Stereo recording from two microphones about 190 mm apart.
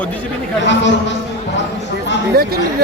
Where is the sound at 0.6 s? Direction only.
70° left (ahead or behind).